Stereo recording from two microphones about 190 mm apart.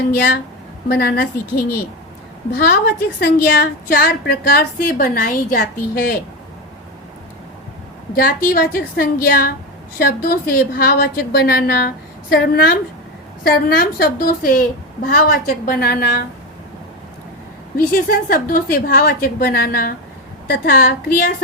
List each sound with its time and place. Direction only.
0.1 s a woman's voice: 55° left (ahead or behind)
8.1 s a woman's voice: 50° left (ahead or behind)
17.7 s a woman's voice: 50° left (ahead or behind)